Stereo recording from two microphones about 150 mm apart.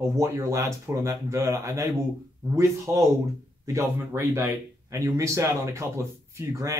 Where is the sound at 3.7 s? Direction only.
20° right (ahead or behind).